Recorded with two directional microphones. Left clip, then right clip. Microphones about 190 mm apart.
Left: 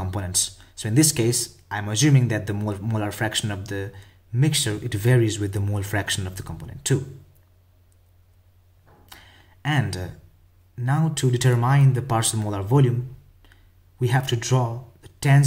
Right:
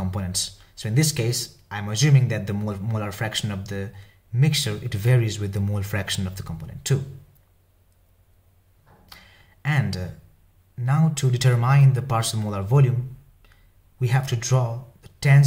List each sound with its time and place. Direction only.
0.0 s speech: 30° left (ahead or behind)
9.1 s a sound: 30° left (ahead or behind)
10.8 s speech: 30° left (ahead or behind)
13.9 s speech: 30° left (ahead or behind)